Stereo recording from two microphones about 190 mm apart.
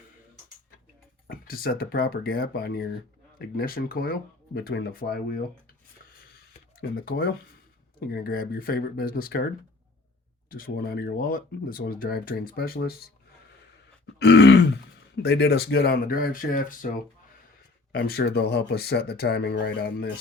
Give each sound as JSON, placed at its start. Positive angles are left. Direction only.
{"t": 1.3, "sound": "speech", "side_deg": 50}
{"t": 6.7, "sound": "speech", "side_deg": 50}
{"t": 10.5, "sound": "speech", "side_deg": 50}
{"t": 14.2, "sound": "grunt", "side_deg": 60}
{"t": 15.1, "sound": "speech", "side_deg": 60}
{"t": 17.9, "sound": "speech", "side_deg": 55}